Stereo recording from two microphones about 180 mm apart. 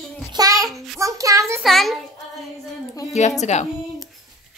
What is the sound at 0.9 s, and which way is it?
Speech, 20° right (ahead or behind).